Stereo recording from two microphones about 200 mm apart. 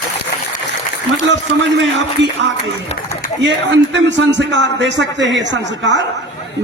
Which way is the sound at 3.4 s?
65° right (ahead or behind).